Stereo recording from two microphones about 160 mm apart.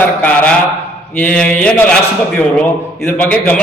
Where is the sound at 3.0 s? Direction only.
10° left (ahead or behind).